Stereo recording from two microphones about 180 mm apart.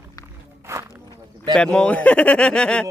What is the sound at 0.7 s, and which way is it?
Walk, 15° right (ahead or behind).